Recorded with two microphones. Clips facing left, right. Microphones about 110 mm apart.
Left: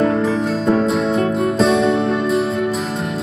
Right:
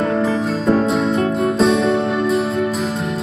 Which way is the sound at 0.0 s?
Centre (ahead or behind).